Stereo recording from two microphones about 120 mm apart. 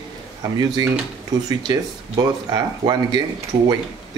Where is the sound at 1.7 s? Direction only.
35° right (ahead or behind).